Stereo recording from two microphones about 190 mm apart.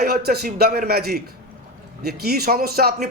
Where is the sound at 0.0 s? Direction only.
55° right (ahead or behind).